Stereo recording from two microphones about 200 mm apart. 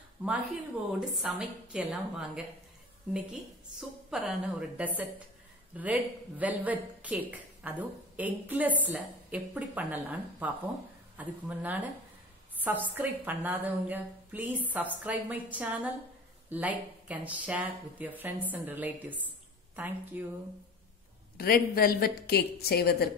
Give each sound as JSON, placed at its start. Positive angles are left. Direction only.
{"t": 0.2, "sound": "a woman's voice", "side_deg": -5}
{"t": 4.1, "sound": "speech", "side_deg": -5}
{"t": 12.5, "sound": "a sound", "side_deg": -10}
{"t": 12.9, "sound": "speech", "side_deg": -10}
{"t": 19.2, "sound": "a sound", "side_deg": -10}
{"t": 21.4, "sound": "a woman's voice", "side_deg": 50}